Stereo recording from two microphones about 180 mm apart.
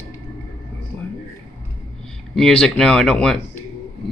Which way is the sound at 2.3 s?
5° left (ahead or behind).